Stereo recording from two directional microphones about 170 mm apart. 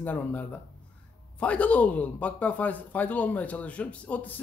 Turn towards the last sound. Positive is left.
turn(degrees=10)  # may be behind; listen again after turning